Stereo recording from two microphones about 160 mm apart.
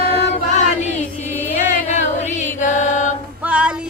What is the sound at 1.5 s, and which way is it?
Music, 45° left (ahead or behind).